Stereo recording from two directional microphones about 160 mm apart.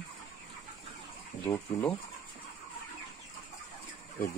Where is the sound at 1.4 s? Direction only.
20° left (ahead or behind).